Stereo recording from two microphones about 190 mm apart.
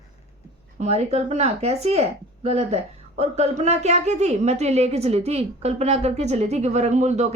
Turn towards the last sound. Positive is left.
turn(degrees=-40)  # may be behind; listen again after turning